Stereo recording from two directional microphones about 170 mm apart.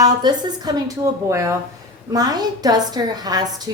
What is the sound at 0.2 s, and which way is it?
A woman's voice, 25° right (ahead or behind).